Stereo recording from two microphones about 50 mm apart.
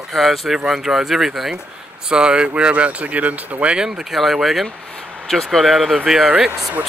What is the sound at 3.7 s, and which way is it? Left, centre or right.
Speech, centre.